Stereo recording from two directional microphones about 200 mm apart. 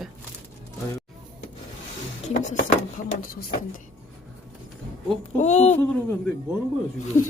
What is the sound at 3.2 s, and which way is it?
Speech, 45° left (ahead or behind).